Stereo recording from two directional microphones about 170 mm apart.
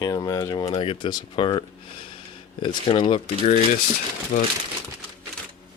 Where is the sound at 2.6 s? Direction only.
30° left (ahead or behind).